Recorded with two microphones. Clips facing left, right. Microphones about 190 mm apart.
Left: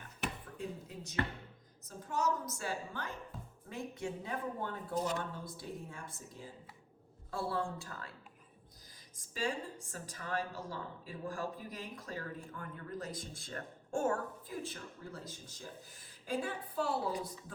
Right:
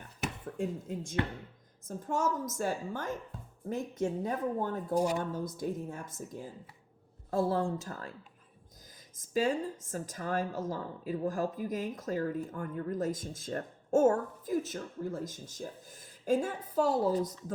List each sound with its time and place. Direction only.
0.2 s a sound: 45° right (ahead or behind)
1.9 s a woman's voice: 50° right (ahead or behind)
9.2 s a woman's voice: 45° right (ahead or behind)